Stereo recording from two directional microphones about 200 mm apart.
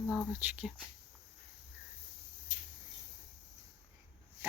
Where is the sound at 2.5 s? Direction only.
35° right (ahead or behind).